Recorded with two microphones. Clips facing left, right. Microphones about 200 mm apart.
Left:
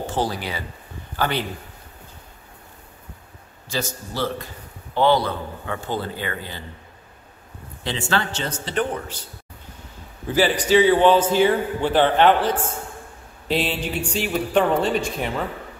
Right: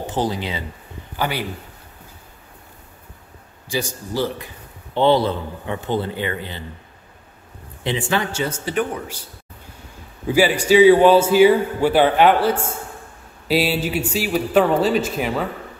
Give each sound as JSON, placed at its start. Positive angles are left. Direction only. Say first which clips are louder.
{"t": 0.0, "sound": "speech", "louder": "right 2 dB", "side_deg": -20}
{"t": 3.6, "sound": "a man's voice", "louder": "right 3 dB", "side_deg": -15}
{"t": 4.9, "sound": "a man's voice", "louder": "right 2 dB", "side_deg": -25}
{"t": 7.8, "sound": "a man's voice", "louder": "right 3 dB", "side_deg": -15}